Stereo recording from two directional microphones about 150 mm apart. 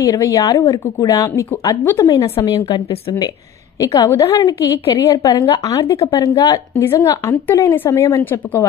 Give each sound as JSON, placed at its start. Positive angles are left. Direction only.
{"t": 0.0, "sound": "a woman's voice", "side_deg": 20}